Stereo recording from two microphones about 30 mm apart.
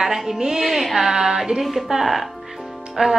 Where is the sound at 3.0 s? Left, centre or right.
Right.